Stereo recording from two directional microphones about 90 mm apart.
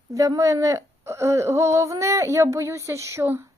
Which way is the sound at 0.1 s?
40° right (ahead or behind).